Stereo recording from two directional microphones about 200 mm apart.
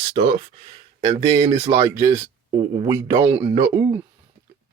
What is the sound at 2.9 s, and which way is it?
Speech, 15° right (ahead or behind).